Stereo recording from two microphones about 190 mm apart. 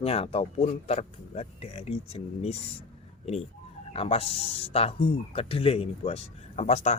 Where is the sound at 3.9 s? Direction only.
30° left (ahead or behind).